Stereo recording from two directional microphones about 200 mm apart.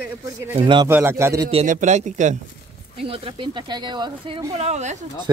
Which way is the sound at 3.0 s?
25° right (ahead or behind).